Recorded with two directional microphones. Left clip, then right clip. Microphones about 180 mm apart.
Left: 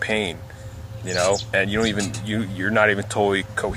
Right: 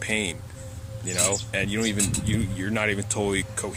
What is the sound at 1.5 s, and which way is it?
Speech, 10° right (ahead or behind).